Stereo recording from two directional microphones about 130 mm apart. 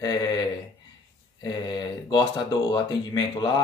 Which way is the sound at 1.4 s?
35° left (ahead or behind).